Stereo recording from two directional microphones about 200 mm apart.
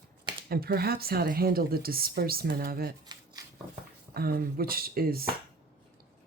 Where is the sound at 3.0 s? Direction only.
20° right (ahead or behind).